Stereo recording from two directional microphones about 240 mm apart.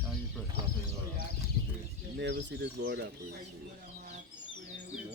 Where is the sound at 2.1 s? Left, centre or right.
Right.